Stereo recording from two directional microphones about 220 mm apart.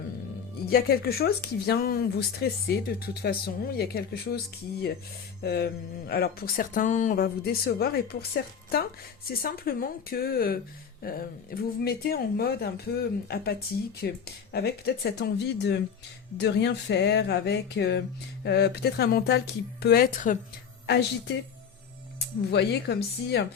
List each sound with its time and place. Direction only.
0.6 s speech: 45° left (ahead or behind)
5.4 s speech: 45° left (ahead or behind)
22.5 s speech: 50° left (ahead or behind)